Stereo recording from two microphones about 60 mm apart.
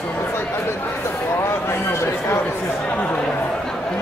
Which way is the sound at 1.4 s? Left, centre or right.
Left.